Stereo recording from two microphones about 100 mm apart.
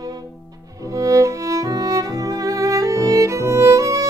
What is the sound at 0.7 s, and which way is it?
Music, 30° right (ahead or behind).